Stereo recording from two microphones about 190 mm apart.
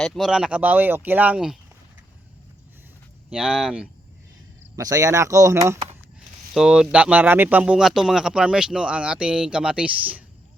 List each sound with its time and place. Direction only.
0.0 s speech: centre (ahead or behind)
3.3 s speech: centre (ahead or behind)
4.8 s speech: 20° right (ahead or behind)
6.5 s speech: 5° right (ahead or behind)